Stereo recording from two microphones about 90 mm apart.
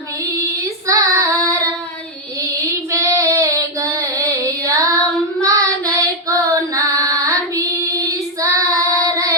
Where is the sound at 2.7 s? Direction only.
35° right (ahead or behind).